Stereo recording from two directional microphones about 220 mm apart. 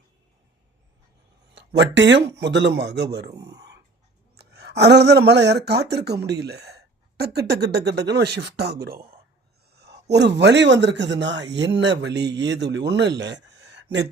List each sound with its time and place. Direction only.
1.5 s speech: 50° right (ahead or behind)
3.4 s whispering: 50° right (ahead or behind)
4.4 s speech: 50° right (ahead or behind)